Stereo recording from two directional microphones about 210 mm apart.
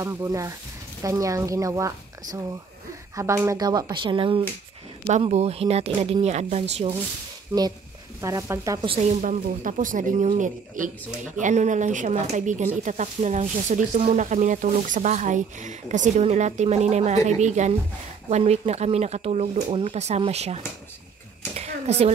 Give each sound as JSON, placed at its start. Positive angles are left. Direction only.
{"t": 0.0, "sound": "a woman's voice", "side_deg": -15}
{"t": 8.2, "sound": "speech", "side_deg": -15}
{"t": 21.5, "sound": "a sound", "side_deg": -30}